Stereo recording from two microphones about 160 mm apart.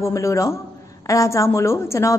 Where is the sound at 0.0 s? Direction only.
20° left (ahead or behind).